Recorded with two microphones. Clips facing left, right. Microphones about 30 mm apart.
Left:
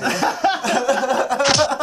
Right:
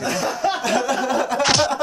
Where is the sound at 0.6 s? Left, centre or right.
Centre.